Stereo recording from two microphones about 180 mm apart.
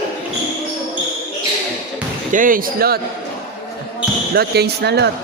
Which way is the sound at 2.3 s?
50° right (ahead or behind).